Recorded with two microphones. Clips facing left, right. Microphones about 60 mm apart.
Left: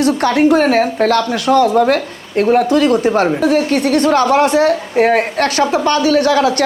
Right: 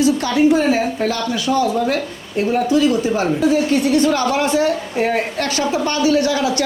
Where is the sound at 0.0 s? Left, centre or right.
Left.